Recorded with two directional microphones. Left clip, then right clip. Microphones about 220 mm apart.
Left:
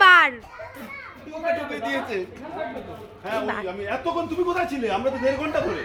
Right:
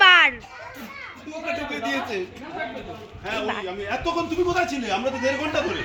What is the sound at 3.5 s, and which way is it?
Speech, 20° left (ahead or behind).